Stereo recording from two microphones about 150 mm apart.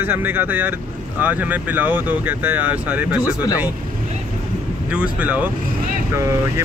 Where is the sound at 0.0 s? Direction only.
10° right (ahead or behind).